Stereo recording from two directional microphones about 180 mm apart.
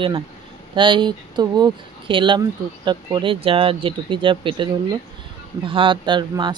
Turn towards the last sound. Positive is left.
turn(degrees=-25)  # may be behind; listen again after turning